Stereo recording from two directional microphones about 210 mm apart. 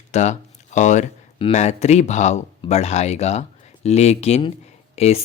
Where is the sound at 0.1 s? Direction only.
35° left (ahead or behind).